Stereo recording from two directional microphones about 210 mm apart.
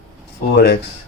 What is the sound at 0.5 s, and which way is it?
Speech, 50° left (ahead or behind).